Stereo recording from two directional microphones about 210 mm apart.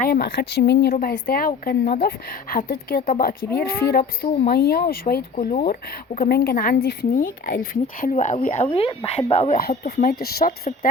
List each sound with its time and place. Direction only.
0.0 s speech: 45° left (ahead or behind)
8.6 s speech: 25° left (ahead or behind)
9.6 s speech: 50° left (ahead or behind)